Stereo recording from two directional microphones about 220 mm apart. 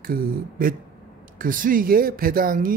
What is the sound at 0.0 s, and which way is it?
Speech, 40° right (ahead or behind).